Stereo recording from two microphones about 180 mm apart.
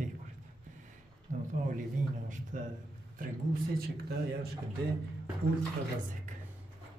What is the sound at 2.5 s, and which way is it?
Speech, 45° right (ahead or behind).